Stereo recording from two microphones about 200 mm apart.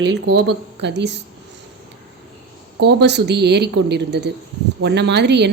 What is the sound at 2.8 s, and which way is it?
A woman's voice, 60° right (ahead or behind).